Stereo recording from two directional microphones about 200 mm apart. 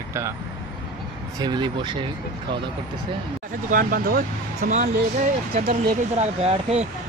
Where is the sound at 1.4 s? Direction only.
20° right (ahead or behind).